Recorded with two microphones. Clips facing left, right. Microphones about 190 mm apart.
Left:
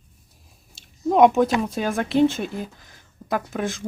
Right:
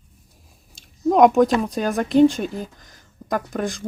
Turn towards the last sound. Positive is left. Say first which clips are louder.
# right 1 dB
turn(degrees=0)  # may be behind; listen again after turning